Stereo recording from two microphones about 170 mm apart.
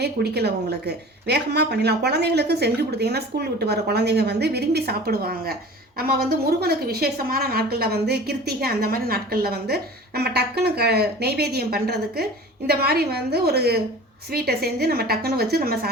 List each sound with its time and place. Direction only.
0.0 s a woman's voice: 75° right (ahead or behind)